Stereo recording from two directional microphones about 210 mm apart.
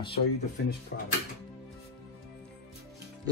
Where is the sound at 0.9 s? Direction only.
50° left (ahead or behind).